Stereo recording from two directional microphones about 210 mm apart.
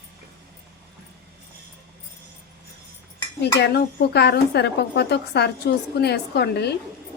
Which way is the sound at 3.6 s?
50° left (ahead or behind).